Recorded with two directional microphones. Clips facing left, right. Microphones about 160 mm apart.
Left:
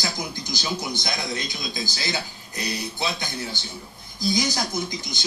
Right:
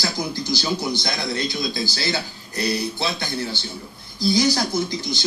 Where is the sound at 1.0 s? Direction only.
20° left (ahead or behind).